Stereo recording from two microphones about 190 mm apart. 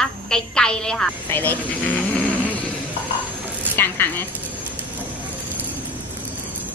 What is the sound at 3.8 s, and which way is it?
Speech, 10° left (ahead or behind).